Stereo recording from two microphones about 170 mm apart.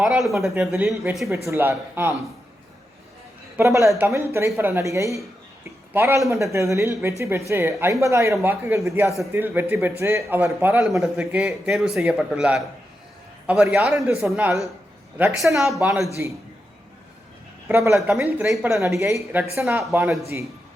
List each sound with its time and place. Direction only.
0.0 s a man's voice: centre (ahead or behind)
1.5 s a man's voice: 15° right (ahead or behind)
3.6 s a man's voice: 15° right (ahead or behind); by 16.0 s centre (ahead or behind)
16.2 s a man's voice: 10° right (ahead or behind)
17.7 s a man's voice: 15° right (ahead or behind)